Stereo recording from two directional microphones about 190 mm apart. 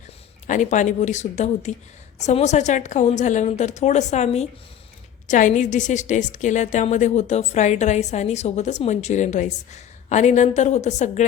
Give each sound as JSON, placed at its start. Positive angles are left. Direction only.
{"t": 0.4, "sound": "a woman's voice", "side_deg": 40}